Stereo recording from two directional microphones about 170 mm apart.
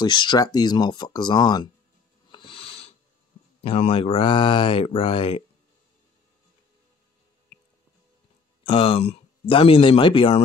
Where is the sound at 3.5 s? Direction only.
40° left (ahead or behind).